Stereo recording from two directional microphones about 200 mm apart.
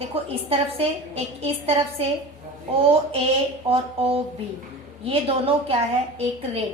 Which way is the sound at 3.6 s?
30° right (ahead or behind).